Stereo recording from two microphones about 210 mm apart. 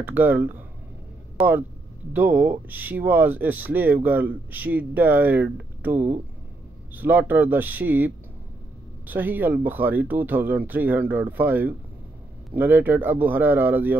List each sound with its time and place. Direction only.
0.0 s speech: 10° right (ahead or behind)